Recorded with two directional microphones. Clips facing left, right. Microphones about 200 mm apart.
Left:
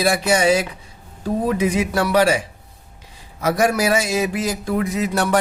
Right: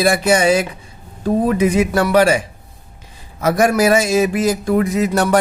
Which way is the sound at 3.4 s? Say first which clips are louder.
Right 4 dB; 50° right (ahead or behind).